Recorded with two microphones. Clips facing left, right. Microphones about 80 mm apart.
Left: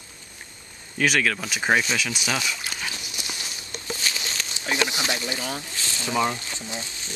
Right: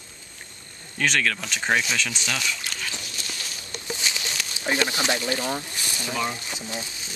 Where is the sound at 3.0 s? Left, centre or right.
Centre.